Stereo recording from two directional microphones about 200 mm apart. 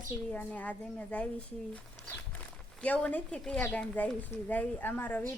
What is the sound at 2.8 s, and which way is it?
Speech, 5° left (ahead or behind).